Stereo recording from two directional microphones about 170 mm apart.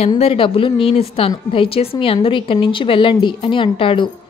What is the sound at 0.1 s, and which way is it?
Speech, 35° left (ahead or behind).